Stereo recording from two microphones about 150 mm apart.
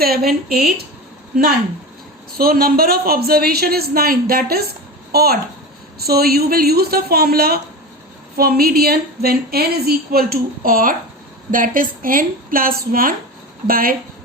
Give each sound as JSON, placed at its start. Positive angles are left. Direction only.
{"t": 0.0, "sound": "a woman's voice", "side_deg": -90}
{"t": 2.4, "sound": "a woman's voice", "side_deg": -80}